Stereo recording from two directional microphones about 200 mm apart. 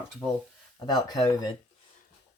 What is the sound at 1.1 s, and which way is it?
Speech, 20° left (ahead or behind).